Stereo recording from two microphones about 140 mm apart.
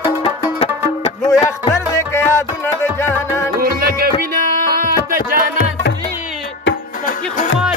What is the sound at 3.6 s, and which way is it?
Music, 90° right.